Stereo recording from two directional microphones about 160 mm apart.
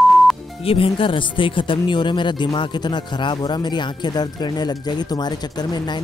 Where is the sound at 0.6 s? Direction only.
35° left (ahead or behind).